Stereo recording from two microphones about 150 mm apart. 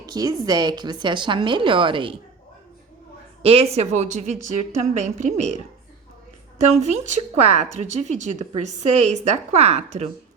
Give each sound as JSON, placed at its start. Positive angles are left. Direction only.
{"t": 0.0, "sound": "a woman's voice", "side_deg": -25}
{"t": 3.4, "sound": "speech", "side_deg": -40}
{"t": 6.7, "sound": "speech", "side_deg": -50}